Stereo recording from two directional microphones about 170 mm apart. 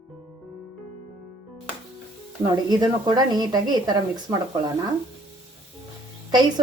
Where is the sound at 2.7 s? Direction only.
25° right (ahead or behind).